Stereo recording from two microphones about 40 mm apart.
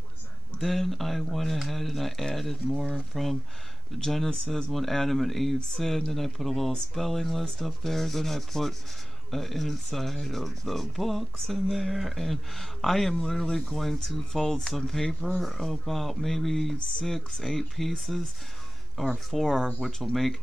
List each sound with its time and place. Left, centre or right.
0.6 s speech: centre
11.7 s speech: centre
13.7 s speech: centre